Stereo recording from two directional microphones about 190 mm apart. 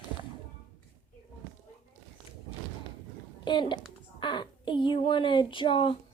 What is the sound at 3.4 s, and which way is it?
A child's voice, 25° left (ahead or behind).